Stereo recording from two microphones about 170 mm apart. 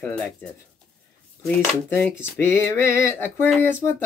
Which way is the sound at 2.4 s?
15° left (ahead or behind).